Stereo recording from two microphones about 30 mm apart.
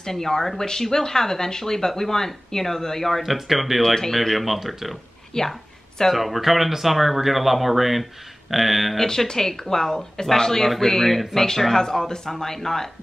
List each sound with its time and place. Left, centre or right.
0.0 s speech: centre
3.2 s speech: centre
3.8 s speech: centre
5.3 s speech: centre
6.0 s speech: centre
9.0 s speech: centre